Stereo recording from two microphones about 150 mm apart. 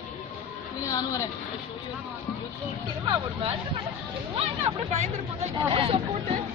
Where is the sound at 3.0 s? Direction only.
30° right (ahead or behind).